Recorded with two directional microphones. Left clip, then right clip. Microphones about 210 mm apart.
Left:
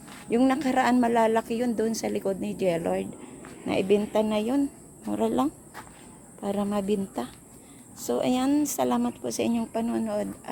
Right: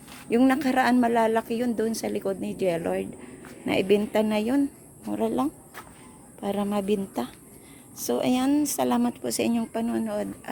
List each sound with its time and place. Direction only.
0.3 s a woman's voice: 10° right (ahead or behind)
5.0 s speech: centre (ahead or behind)
6.4 s speech: 10° right (ahead or behind)